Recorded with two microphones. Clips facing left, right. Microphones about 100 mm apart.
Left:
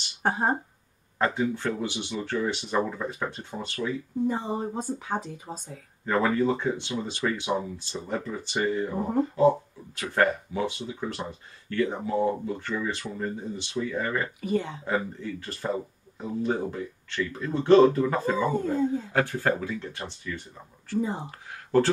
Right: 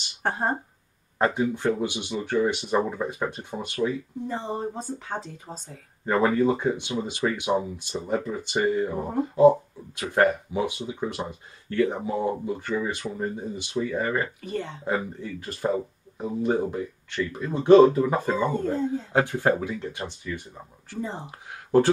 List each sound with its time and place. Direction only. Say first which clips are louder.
0.2 s speech: left 1 dB; 10° left (ahead or behind)
1.1 s speech: right 2 dB; 20° right (ahead or behind)
4.3 s speech: left 1 dB; 15° left (ahead or behind)
6.0 s speech: right 2 dB; 20° right (ahead or behind)
14.4 s speech: left 4 dB; 10° left (ahead or behind)
15.1 s speech: even; 15° right (ahead or behind)
18.4 s speech: right 1 dB; 10° left (ahead or behind)
19.1 s speech: right 5 dB; 20° right (ahead or behind)
21.0 s speech: left 1 dB; 10° left (ahead or behind)
21.3 s a sound: right 3 dB; 15° right (ahead or behind)